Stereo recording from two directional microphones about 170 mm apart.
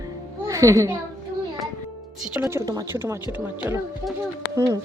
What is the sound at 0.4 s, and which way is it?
Speech, 20° right (ahead or behind).